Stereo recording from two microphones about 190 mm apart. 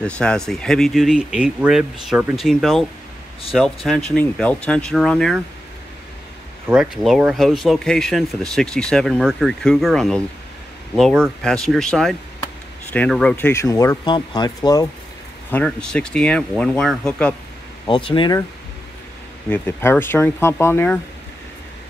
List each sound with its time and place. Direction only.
0.0 s speech: 5° left (ahead or behind)
6.7 s speech: centre (ahead or behind); by 14.9 s 20° left (ahead or behind)
15.5 s speech: 5° left (ahead or behind)
17.8 s speech: 25° left (ahead or behind)
19.5 s speech: 10° left (ahead or behind)